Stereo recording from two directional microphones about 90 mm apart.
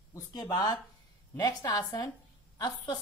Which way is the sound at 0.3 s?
45° left (ahead or behind).